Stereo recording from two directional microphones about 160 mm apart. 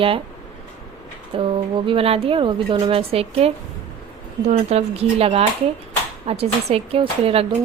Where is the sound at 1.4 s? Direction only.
35° right (ahead or behind).